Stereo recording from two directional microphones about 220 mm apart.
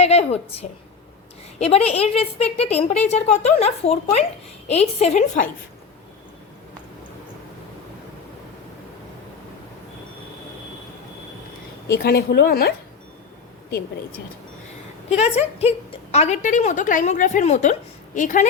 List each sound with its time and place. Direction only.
0.0 s a woman's voice: 30° left (ahead or behind)
11.9 s a woman's voice: 45° left (ahead or behind)
15.1 s speech: 30° left (ahead or behind)